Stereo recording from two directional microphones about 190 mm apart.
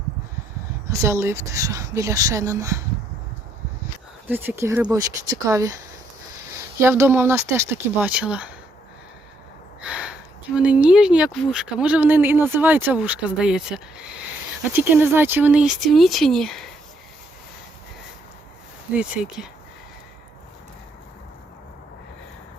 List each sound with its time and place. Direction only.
0.9 s speech: 15° right (ahead or behind)
4.3 s speech: 10° right (ahead or behind)
6.7 s speech: 15° right (ahead or behind)
9.8 s speech: 5° right (ahead or behind)
18.9 s speech: 5° right (ahead or behind)